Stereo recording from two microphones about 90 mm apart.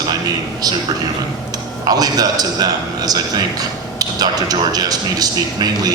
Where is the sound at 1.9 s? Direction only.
45° right (ahead or behind).